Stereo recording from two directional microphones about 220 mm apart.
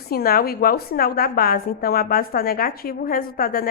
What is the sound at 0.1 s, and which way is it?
A woman's voice, 45° left (ahead or behind).